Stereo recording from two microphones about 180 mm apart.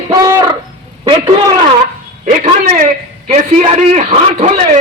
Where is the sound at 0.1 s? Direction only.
15° right (ahead or behind).